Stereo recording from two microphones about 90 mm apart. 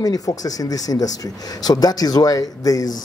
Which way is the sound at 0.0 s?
45° left (ahead or behind).